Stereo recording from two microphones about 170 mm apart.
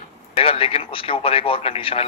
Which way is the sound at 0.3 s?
35° left (ahead or behind).